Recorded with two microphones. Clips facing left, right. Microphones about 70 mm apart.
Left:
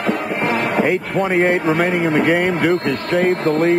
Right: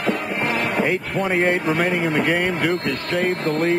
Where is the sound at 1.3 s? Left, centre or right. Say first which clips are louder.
Left 3 dB; centre.